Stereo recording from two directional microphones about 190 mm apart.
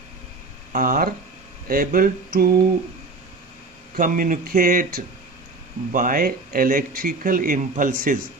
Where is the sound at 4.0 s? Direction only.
45° right (ahead or behind).